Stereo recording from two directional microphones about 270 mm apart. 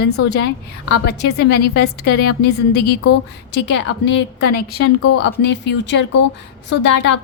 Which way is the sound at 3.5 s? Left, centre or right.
Left.